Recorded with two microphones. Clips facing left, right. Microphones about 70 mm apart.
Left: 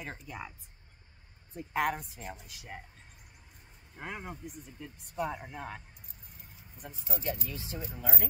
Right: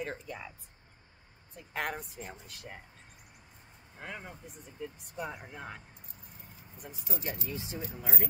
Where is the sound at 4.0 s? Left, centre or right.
Centre.